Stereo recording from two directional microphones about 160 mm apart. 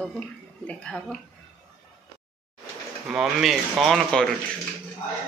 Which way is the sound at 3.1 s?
Centre (ahead or behind).